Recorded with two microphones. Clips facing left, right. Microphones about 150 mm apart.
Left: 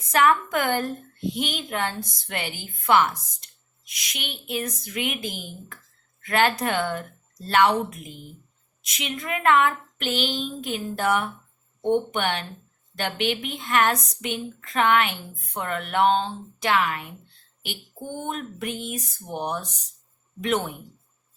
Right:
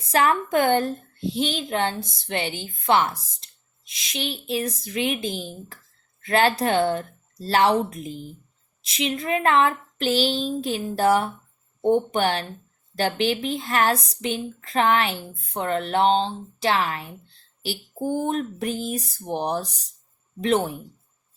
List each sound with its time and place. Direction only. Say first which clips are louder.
0.0 s a woman's voice: even; 30° right (ahead or behind)